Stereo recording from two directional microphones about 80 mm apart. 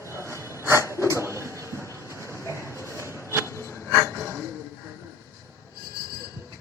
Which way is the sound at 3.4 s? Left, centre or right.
Left.